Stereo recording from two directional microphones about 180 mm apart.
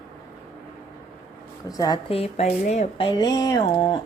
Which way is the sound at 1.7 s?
20° left (ahead or behind).